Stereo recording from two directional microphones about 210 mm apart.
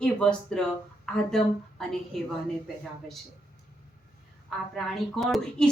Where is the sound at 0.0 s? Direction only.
5° left (ahead or behind).